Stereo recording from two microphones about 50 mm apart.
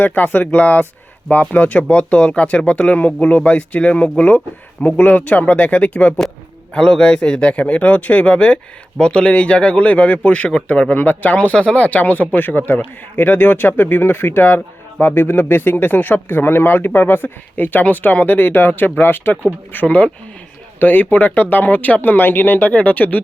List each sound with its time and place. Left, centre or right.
0.0 s speech: left
6.7 s speech: centre
11.9 s speech: left
19.7 s speech: left
22.6 s speech: left